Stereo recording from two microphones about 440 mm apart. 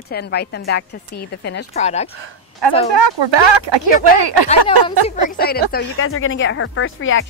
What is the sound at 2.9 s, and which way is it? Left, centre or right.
Speech, right.